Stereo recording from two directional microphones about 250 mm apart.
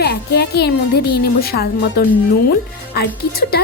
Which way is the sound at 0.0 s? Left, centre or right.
Left.